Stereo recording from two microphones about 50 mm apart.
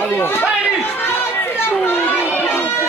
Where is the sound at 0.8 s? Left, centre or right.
Left.